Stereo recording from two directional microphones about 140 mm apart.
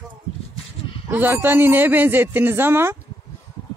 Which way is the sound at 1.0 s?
15° right (ahead or behind).